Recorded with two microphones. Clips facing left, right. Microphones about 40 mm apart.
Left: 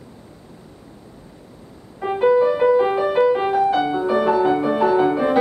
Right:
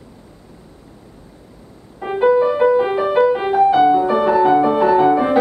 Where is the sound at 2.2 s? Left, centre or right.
Centre.